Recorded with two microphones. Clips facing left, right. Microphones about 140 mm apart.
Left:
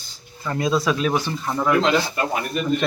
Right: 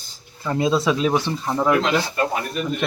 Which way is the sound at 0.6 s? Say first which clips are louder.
Right 2 dB; 25° right (ahead or behind).